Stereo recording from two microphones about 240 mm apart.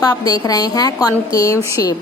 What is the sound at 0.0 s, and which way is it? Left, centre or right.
A woman's voice, centre.